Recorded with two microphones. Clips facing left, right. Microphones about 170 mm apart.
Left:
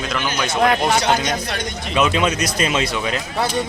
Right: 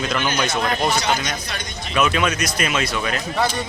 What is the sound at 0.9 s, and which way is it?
Speech, 75° left (ahead or behind).